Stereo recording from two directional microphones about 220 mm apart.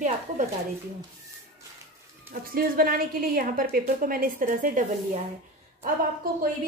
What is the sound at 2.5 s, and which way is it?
A woman's voice, 40° right (ahead or behind).